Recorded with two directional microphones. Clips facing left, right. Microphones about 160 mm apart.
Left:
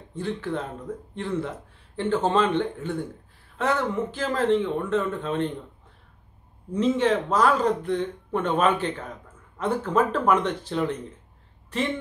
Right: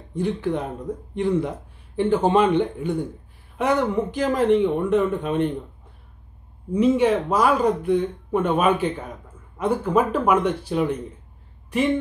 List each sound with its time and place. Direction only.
0.1 s speech: 15° right (ahead or behind)
6.7 s speech: 10° right (ahead or behind)